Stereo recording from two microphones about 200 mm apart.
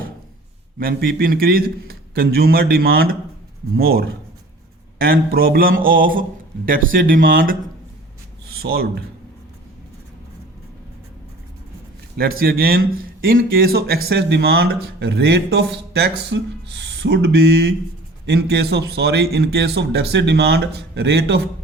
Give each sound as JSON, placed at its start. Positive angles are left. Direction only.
{"t": 0.8, "sound": "speech", "side_deg": -45}
{"t": 8.5, "sound": "speech", "side_deg": -50}
{"t": 12.1, "sound": "speech", "side_deg": -50}